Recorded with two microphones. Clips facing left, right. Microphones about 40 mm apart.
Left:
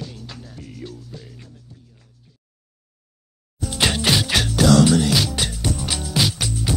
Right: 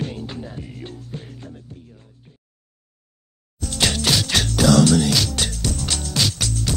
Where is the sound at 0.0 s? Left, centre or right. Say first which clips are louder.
Right 7 dB; right.